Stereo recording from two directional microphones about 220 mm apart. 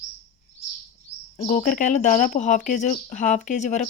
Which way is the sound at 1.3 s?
25° left (ahead or behind).